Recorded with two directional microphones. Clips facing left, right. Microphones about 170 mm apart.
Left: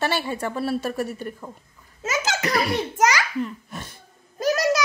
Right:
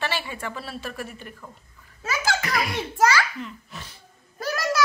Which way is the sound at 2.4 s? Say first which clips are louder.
Left 4 dB; 40° left (ahead or behind).